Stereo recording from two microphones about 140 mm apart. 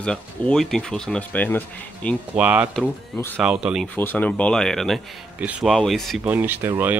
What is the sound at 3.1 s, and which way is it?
Speech, 15° left (ahead or behind).